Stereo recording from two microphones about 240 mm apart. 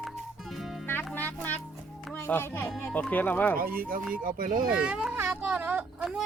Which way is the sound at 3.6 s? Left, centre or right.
Right.